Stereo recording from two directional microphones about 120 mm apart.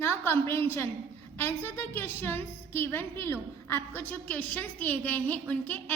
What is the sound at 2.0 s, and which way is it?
A woman's voice, 20° left (ahead or behind).